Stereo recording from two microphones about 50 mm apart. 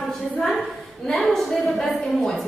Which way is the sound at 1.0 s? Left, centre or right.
Centre.